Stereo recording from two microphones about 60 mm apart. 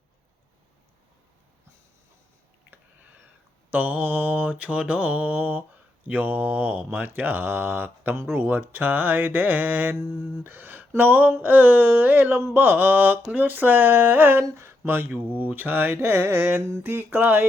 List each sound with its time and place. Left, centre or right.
3.7 s mantra: right
14.5 s speech: right
15.4 s mantra: right